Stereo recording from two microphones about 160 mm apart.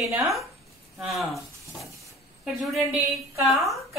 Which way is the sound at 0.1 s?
Centre (ahead or behind).